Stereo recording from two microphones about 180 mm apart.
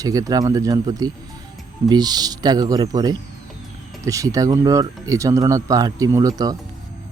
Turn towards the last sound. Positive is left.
turn(degrees=-20)  # may be behind; listen again after turning